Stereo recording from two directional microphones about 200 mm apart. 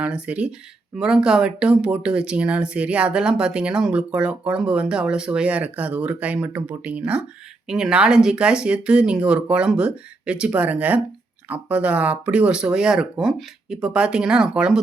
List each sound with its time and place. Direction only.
0.0 s speech: 5° right (ahead or behind)